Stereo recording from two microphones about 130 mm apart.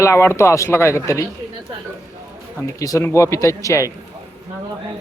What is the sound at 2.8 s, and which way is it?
Speech, 25° left (ahead or behind).